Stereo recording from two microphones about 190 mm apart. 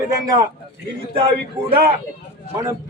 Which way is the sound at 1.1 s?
30° right (ahead or behind).